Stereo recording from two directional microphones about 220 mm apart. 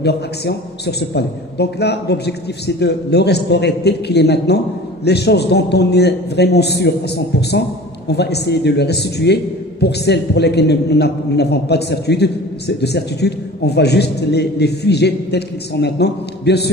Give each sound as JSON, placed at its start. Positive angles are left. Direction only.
{"t": 0.0, "sound": "a man's voice", "side_deg": 50}